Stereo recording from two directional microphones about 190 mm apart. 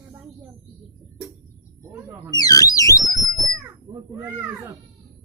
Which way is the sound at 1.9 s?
10° right (ahead or behind).